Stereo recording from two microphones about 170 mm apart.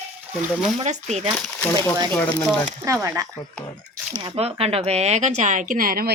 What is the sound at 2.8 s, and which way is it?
Speech, 15° right (ahead or behind).